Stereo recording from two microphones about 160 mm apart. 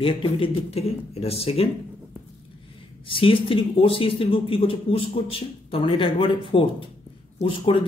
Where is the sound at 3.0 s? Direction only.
35° left (ahead or behind).